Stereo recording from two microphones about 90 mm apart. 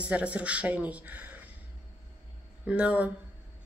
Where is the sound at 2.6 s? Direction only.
15° right (ahead or behind).